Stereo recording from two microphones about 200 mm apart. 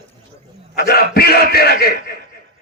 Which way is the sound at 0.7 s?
50° left (ahead or behind).